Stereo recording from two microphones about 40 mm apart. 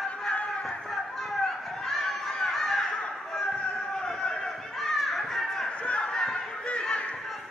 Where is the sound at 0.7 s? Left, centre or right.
Centre.